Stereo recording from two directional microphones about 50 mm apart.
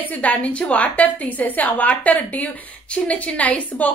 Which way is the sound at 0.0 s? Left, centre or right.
Left.